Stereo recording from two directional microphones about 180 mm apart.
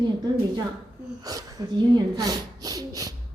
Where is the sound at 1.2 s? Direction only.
20° right (ahead or behind).